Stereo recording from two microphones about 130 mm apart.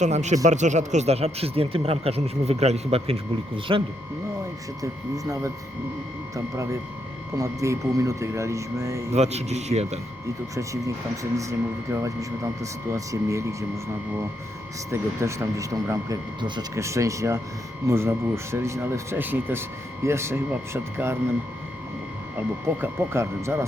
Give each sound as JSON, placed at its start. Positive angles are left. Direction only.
{"t": 0.0, "sound": "a man's voice", "side_deg": -65}
{"t": 4.8, "sound": "speech", "side_deg": -25}
{"t": 9.1, "sound": "speech", "side_deg": -60}
{"t": 10.5, "sound": "speech", "side_deg": -25}
{"t": 14.8, "sound": "speech", "side_deg": -20}
{"t": 22.6, "sound": "speech", "side_deg": -20}